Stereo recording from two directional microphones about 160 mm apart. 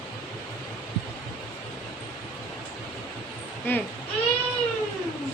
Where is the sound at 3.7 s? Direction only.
15° left (ahead or behind).